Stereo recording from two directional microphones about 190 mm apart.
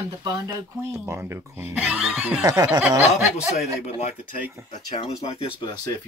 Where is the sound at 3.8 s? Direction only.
35° left (ahead or behind).